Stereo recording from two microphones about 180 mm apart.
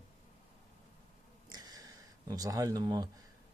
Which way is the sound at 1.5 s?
20° right (ahead or behind).